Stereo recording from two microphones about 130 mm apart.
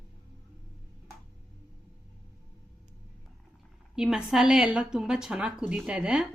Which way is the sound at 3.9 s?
5° right (ahead or behind).